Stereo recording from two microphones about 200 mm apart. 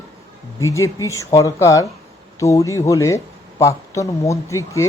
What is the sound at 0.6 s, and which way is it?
A man's voice, 15° left (ahead or behind).